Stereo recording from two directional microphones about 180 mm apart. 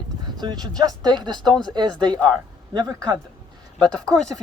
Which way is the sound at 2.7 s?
20° right (ahead or behind).